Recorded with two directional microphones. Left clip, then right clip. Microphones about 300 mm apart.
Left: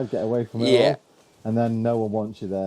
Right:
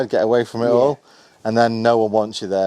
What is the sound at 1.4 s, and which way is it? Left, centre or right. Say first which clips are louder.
Speech: right 9 dB; centre.